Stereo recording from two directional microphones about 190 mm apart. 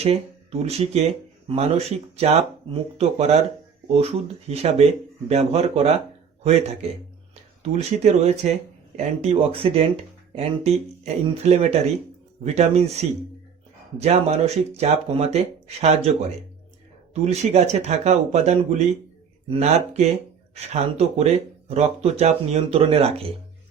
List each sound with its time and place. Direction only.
0.0 s a man's voice: 35° right (ahead or behind)
17.2 s speech: 35° right (ahead or behind)